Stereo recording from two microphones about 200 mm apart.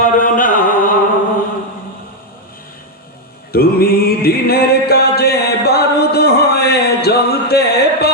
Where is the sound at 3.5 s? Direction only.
50° left (ahead or behind).